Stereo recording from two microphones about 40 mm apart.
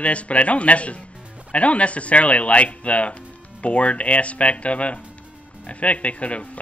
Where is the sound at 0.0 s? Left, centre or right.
Left.